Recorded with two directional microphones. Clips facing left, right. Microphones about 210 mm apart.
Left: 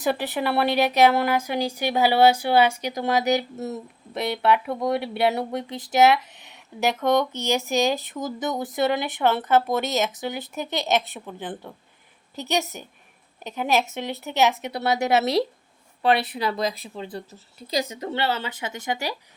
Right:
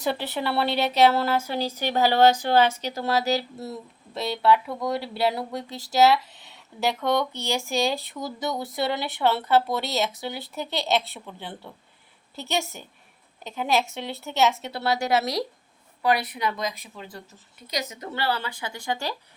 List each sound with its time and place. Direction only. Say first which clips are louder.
0.0 s speech: left 3 dB; 15° left (ahead or behind)